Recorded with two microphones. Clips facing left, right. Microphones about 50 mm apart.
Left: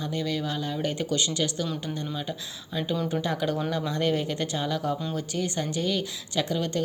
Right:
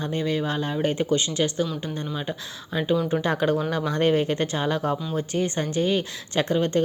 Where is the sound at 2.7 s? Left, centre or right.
Right.